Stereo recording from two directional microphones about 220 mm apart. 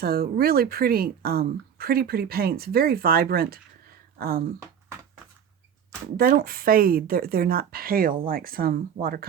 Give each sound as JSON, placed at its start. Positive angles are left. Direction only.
{"t": 0.0, "sound": "speech", "side_deg": -45}
{"t": 6.1, "sound": "a woman's voice", "side_deg": -40}